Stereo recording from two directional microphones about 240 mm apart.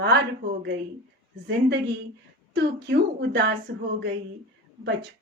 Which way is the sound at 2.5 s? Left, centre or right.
Right.